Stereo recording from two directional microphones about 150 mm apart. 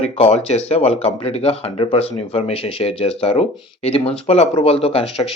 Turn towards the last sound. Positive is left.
turn(degrees=40)  # may be behind; listen again after turning